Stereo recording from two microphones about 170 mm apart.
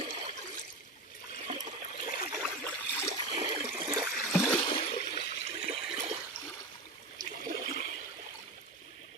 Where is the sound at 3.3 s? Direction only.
35° right (ahead or behind).